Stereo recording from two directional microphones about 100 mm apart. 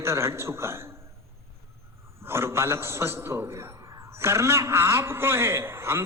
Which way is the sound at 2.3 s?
25° right (ahead or behind).